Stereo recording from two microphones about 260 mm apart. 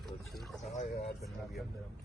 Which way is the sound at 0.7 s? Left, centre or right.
Left.